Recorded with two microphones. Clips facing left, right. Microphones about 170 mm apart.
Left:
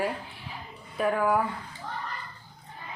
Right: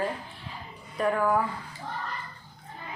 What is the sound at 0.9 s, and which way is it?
Speech, 5° left (ahead or behind).